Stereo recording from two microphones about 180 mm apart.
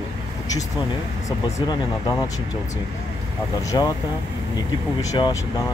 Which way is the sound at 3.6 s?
20° left (ahead or behind).